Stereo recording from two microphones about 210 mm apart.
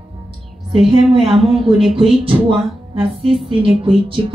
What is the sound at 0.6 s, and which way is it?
Speech, 25° right (ahead or behind).